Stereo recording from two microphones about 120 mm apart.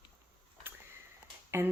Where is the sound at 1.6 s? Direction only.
20° right (ahead or behind).